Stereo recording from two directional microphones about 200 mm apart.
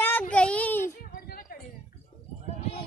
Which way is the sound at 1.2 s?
45° left (ahead or behind).